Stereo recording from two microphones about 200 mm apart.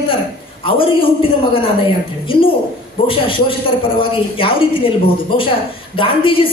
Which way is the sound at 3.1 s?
25° left (ahead or behind).